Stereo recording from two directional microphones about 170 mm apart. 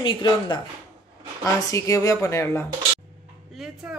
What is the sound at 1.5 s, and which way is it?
A woman's voice, 20° left (ahead or behind).